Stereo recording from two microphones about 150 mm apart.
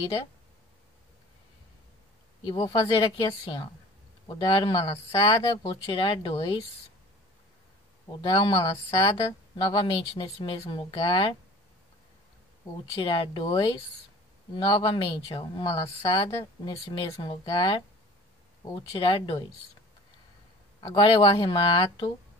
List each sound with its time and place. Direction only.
2.4 s speech: 25° left (ahead or behind)
5.9 s speech: 35° left (ahead or behind)
8.2 s speech: 30° left (ahead or behind)
13.0 s speech: 35° left (ahead or behind)
14.7 s speech: 30° left (ahead or behind)
16.9 s speech: 35° left (ahead or behind)
18.9 s speech: 35° left (ahead or behind)
20.8 s speech: 30° left (ahead or behind)